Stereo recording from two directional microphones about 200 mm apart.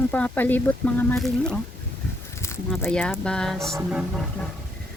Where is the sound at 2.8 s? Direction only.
5° left (ahead or behind).